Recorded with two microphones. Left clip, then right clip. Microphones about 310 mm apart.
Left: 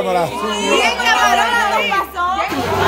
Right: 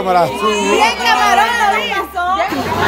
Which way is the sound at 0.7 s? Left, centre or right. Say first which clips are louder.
Even; centre.